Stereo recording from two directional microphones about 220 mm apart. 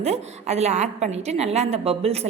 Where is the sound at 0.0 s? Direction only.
30° right (ahead or behind).